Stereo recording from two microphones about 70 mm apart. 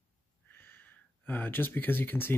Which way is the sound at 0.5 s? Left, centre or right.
Left.